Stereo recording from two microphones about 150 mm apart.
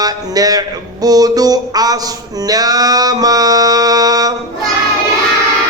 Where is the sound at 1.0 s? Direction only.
25° right (ahead or behind).